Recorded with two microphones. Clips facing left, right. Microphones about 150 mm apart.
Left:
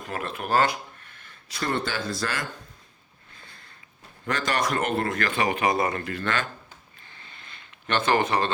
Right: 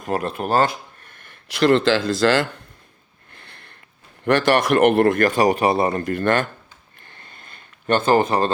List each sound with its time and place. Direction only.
0.0 s speech: 40° right (ahead or behind)
1.5 s speech: 90° right
3.3 s sniff: 65° right (ahead or behind)
4.3 s speech: 60° right (ahead or behind); by 6.0 s 30° right (ahead or behind)
6.1 s speech: 50° right (ahead or behind)
7.1 s a sound: 55° right (ahead or behind)